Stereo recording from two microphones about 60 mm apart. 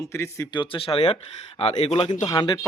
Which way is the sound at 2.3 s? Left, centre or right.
Left.